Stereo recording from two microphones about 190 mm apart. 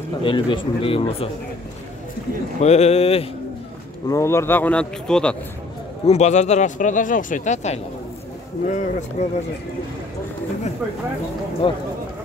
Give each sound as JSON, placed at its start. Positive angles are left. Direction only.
{"t": 0.2, "sound": "speech", "side_deg": 25}
{"t": 2.6, "sound": "speech", "side_deg": 35}
{"t": 4.1, "sound": "speech", "side_deg": 15}
{"t": 6.0, "sound": "speech", "side_deg": 35}
{"t": 11.6, "sound": "speech", "side_deg": 25}